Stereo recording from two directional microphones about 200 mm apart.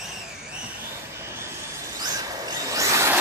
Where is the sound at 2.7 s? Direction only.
15° right (ahead or behind).